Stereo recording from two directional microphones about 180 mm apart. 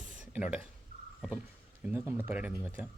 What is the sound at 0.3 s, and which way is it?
Speech, 5° right (ahead or behind).